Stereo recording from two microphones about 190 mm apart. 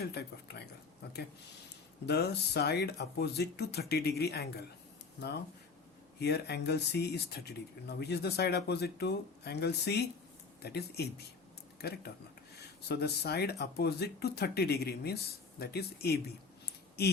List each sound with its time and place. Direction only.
0.0 s speech: 60° left (ahead or behind)
6.1 s speech: 60° left (ahead or behind)